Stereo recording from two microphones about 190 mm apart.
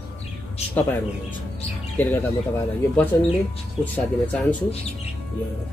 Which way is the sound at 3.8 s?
10° left (ahead or behind).